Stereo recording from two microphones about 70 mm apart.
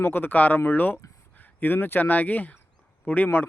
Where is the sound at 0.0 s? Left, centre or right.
Left.